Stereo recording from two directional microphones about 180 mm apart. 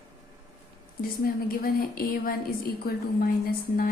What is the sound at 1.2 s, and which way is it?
A woman's voice, 55° left (ahead or behind).